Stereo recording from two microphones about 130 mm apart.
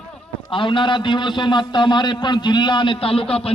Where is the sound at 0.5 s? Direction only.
40° left (ahead or behind).